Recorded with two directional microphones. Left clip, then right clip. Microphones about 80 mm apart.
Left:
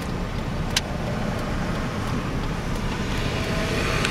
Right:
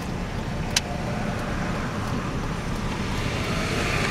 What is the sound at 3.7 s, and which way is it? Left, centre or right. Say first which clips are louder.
Vehicle: left 1 dB; right.